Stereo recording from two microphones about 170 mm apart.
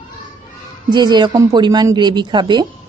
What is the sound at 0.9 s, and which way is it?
A woman's voice, 25° right (ahead or behind).